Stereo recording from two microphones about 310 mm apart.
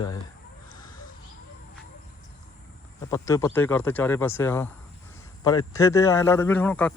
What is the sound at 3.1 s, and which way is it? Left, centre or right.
Speech, centre.